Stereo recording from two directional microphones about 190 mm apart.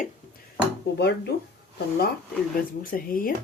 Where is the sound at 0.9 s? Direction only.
60° left (ahead or behind).